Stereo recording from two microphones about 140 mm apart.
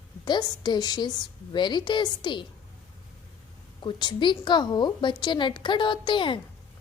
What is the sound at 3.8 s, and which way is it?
A woman's voice, 35° left (ahead or behind).